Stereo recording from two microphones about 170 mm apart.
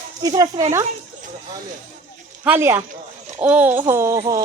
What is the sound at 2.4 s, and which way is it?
Speech, 10° right (ahead or behind).